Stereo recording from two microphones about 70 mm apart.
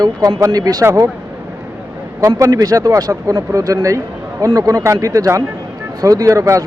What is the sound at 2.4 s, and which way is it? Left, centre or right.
A man's voice, right.